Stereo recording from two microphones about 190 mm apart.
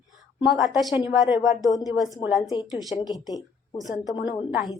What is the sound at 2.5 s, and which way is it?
A woman's voice, 20° left (ahead or behind).